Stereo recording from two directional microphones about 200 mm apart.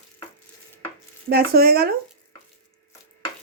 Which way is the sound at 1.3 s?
50° right (ahead or behind).